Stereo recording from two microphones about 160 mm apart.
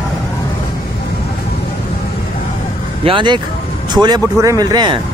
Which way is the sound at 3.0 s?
30° right (ahead or behind).